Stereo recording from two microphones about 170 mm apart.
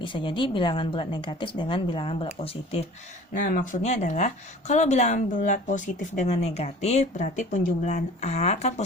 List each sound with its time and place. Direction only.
0.0 s speech: 30° left (ahead or behind)
3.3 s speech: 50° left (ahead or behind)